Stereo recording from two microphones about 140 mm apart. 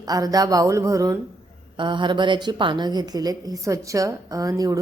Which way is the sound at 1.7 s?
35° right (ahead or behind).